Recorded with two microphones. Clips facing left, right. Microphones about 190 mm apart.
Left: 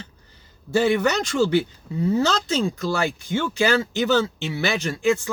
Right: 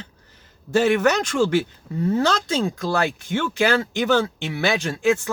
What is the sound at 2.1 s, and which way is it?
Speech, 55° right (ahead or behind).